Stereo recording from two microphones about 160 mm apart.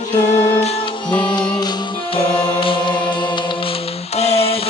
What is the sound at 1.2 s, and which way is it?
Music, 25° left (ahead or behind).